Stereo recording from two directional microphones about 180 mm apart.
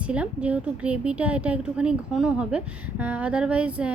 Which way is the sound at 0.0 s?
5° right (ahead or behind).